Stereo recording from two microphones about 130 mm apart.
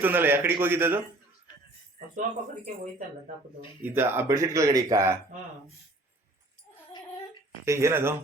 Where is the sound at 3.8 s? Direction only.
15° right (ahead or behind).